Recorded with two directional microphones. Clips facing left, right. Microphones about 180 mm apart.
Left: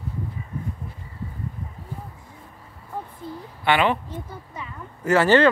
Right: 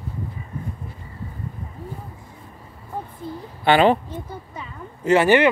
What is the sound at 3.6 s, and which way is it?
Speech, 35° right (ahead or behind).